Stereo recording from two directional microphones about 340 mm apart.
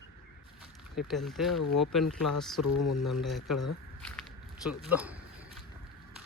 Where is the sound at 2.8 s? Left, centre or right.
Left.